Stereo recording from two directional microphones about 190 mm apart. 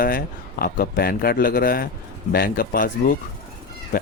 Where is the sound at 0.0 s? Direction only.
50° left (ahead or behind).